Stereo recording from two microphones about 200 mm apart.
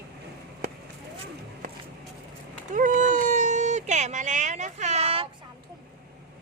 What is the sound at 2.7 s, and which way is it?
Speech, 40° right (ahead or behind).